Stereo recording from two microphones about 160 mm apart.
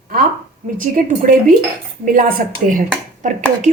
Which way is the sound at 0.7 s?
55° right (ahead or behind).